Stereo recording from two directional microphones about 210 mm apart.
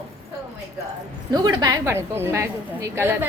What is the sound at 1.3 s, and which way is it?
A woman's voice, 20° right (ahead or behind).